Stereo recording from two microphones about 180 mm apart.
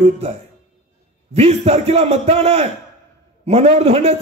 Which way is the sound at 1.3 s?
35° right (ahead or behind).